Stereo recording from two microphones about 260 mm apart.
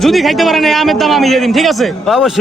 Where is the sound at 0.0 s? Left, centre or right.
Centre.